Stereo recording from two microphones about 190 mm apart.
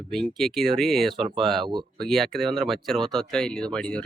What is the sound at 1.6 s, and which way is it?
Speech, 25° right (ahead or behind).